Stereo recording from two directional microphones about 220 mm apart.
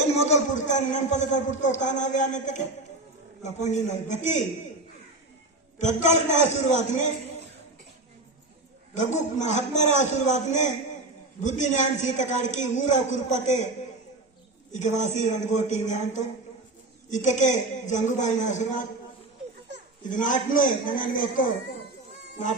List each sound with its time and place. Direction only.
0.2 s a man's voice: 30° left (ahead or behind)
5.8 s a man's voice: 30° left (ahead or behind)
9.0 s a man's voice: 35° left (ahead or behind)
14.7 s a man's voice: 35° left (ahead or behind)
20.1 s a man's voice: 35° left (ahead or behind)